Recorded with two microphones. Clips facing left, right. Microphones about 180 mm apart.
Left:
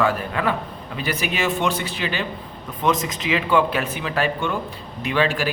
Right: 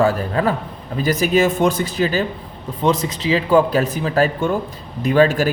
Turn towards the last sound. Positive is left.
turn(degrees=-45)  # may be behind; listen again after turning